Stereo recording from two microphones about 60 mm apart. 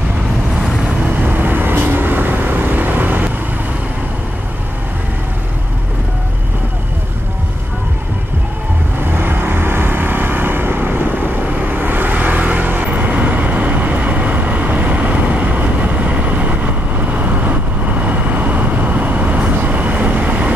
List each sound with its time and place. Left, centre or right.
0.8 s vehicle: right
9.1 s vehicle: right